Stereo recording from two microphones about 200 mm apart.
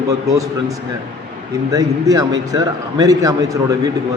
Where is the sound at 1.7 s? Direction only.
15° right (ahead or behind).